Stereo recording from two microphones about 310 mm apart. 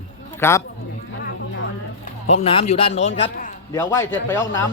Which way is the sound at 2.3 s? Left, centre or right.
Centre.